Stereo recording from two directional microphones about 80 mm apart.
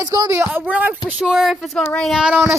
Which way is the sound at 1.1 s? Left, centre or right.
Centre.